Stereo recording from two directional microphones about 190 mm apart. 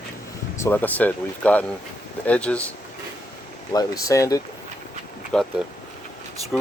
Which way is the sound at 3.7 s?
20° left (ahead or behind).